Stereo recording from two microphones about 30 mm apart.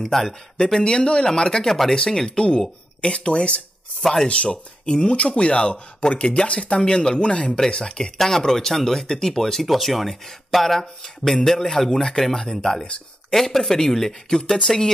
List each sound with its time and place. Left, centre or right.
0.0 s speech: centre
0.7 s speech: left
1.7 s speech: centre
2.3 s speech: left
6.8 s speech: left
7.2 s speech: left
8.2 s speech: centre